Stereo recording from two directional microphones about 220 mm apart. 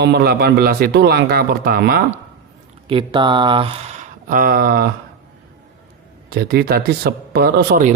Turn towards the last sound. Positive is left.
turn(degrees=-45)  # may be behind; listen again after turning